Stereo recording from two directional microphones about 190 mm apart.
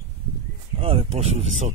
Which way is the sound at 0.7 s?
30° right (ahead or behind).